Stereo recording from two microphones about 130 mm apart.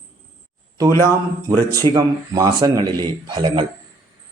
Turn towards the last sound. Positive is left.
turn(degrees=-35)  # may be behind; listen again after turning